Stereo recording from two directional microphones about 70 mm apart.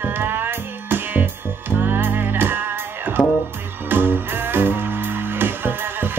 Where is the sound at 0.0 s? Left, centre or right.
Right.